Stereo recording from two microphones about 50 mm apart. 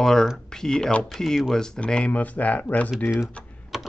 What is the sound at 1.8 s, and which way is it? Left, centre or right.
Speech, left.